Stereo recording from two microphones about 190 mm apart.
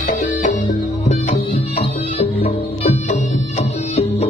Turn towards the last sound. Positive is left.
turn(degrees=35)  # may be behind; listen again after turning